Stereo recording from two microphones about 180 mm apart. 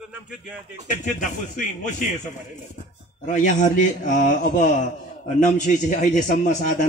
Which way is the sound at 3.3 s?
45° left (ahead or behind).